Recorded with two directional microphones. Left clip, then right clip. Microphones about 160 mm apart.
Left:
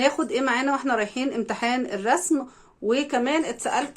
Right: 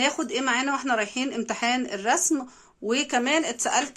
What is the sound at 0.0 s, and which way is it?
Speech, 10° right (ahead or behind).